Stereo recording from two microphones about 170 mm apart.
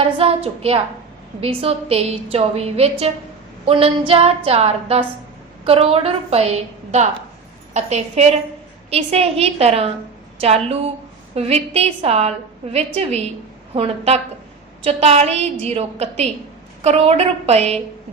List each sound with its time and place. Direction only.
0.2 s a woman's voice: 35° right (ahead or behind)
11.3 s a woman's voice: 35° right (ahead or behind)